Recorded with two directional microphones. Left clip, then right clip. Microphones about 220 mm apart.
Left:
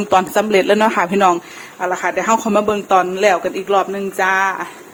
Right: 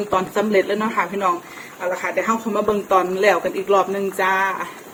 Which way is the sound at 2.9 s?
30° left (ahead or behind).